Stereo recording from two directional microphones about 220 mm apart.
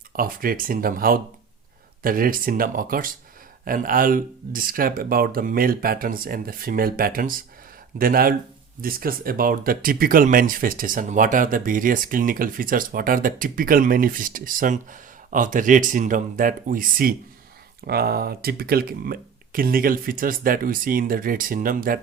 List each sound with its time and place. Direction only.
0.2 s speech: 40° right (ahead or behind)